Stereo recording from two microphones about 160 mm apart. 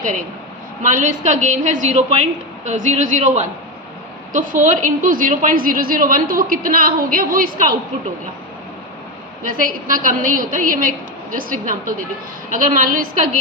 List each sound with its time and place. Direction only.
0.8 s a woman's voice: 55° right (ahead or behind)
9.4 s a woman's voice: 60° right (ahead or behind)